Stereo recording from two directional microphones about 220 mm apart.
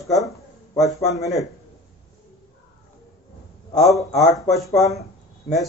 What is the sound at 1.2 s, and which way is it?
Speech, centre (ahead or behind).